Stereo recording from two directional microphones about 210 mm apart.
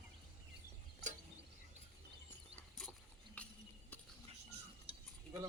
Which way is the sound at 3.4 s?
5° left (ahead or behind).